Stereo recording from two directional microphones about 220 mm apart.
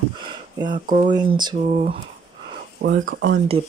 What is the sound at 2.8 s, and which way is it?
Speech, 60° right (ahead or behind).